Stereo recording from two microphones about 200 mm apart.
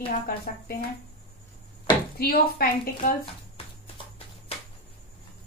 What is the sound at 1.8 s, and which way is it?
Speech, 50° left (ahead or behind).